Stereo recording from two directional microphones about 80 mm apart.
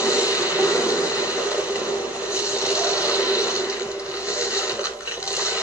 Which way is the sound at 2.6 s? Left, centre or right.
Centre.